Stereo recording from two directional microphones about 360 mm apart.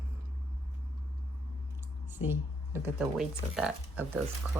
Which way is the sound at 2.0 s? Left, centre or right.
Centre.